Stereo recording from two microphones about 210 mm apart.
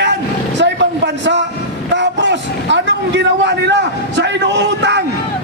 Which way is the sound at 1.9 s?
55° right (ahead or behind).